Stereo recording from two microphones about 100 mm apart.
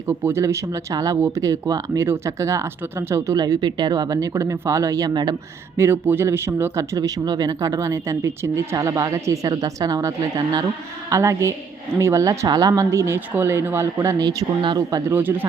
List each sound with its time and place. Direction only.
0.1 s speech: 25° right (ahead or behind)
3.3 s speech: 40° right (ahead or behind)
5.7 s speech: 25° right (ahead or behind); by 15.0 s 40° right (ahead or behind)
15.1 s speech: 20° right (ahead or behind)